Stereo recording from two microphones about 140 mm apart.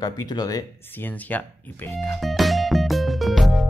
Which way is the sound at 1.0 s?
10° left (ahead or behind).